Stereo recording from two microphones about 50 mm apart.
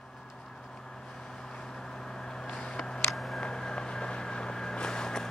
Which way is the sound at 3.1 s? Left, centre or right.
Centre.